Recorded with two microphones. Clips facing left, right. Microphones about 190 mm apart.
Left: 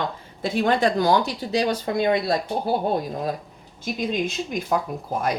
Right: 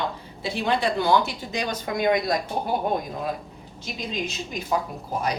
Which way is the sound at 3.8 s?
50° left (ahead or behind).